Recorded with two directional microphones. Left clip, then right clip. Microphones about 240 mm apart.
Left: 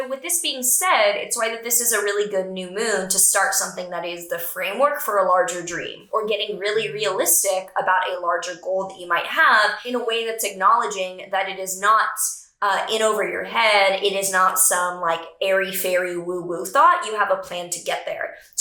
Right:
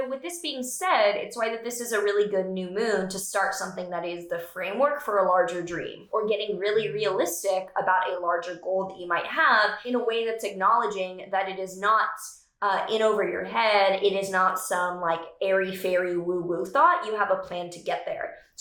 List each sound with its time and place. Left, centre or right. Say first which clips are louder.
0.0 s a woman's voice: left 5 dB; centre
8.6 s speech: left 3 dB; centre
9.1 s a woman's voice: left 5 dB; centre